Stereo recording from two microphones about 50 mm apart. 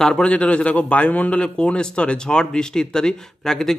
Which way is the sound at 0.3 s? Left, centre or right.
Left.